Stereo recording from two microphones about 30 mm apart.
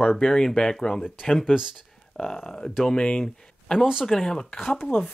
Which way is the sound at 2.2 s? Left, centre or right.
Left.